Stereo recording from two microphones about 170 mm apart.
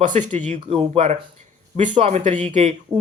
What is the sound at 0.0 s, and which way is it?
Speech, 45° right (ahead or behind).